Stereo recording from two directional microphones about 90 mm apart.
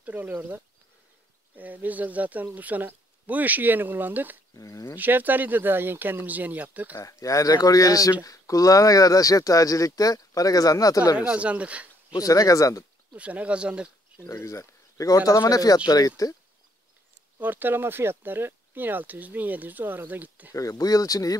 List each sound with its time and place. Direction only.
0.0 s speech: 20° right (ahead or behind)
1.6 s speech: 20° right (ahead or behind)
4.6 s speech: 40° left (ahead or behind)
4.9 s speech: 20° right (ahead or behind)
7.0 s speech: 35° left (ahead or behind)
11.1 s speech: 15° right (ahead or behind)
12.2 s speech: 40° left (ahead or behind)
13.1 s speech: 15° right (ahead or behind)
14.2 s speech: 30° left (ahead or behind)
17.4 s speech: 20° right (ahead or behind)
20.5 s speech: 40° left (ahead or behind)